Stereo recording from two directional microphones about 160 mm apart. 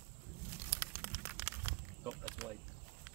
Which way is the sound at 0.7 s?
15° right (ahead or behind).